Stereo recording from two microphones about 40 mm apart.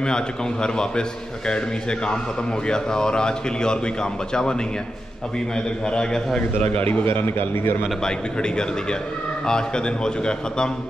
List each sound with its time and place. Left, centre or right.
0.0 s a man's voice: left
5.9 s a man's voice: left
7.2 s a man's voice: left
8.0 s a man's voice: centre